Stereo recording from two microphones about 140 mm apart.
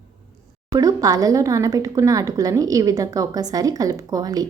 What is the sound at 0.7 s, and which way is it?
Speech, 25° right (ahead or behind).